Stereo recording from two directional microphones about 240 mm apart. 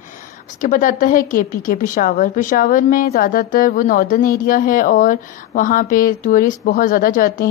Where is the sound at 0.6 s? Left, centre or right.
Left.